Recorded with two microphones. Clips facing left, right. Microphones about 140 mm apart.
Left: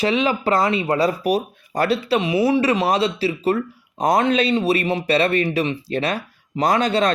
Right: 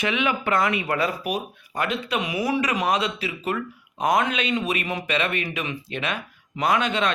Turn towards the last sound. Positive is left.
turn(degrees=35)  # may be behind; listen again after turning